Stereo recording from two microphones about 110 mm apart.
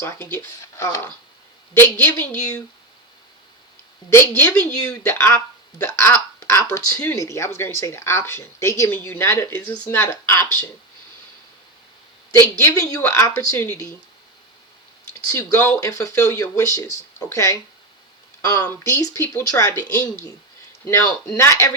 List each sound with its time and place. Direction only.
0.0 s speech: 20° left (ahead or behind)
4.1 s speech: 20° left (ahead or behind)
12.3 s speech: 25° left (ahead or behind)
15.3 s speech: 30° left (ahead or behind)
15.5 s speech: 20° left (ahead or behind)
18.6 s speech: 20° left (ahead or behind)
20.8 s speech: 30° left (ahead or behind)